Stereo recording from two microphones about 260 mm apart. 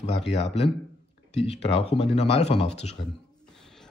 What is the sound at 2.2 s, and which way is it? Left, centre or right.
Speech, left.